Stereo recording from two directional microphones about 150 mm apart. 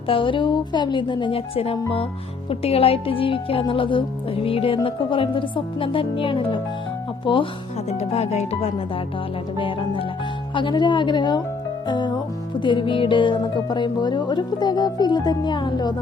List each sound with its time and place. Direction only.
0.1 s speech: 35° left (ahead or behind)
7.9 s speech: 45° left (ahead or behind)
9.6 s speech: 35° left (ahead or behind)
11.9 s music: 30° left (ahead or behind)